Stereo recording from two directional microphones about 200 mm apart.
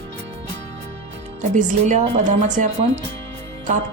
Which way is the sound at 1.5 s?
35° right (ahead or behind).